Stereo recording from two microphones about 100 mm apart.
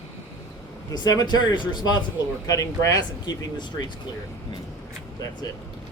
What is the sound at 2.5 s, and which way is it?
Speech, 35° left (ahead or behind).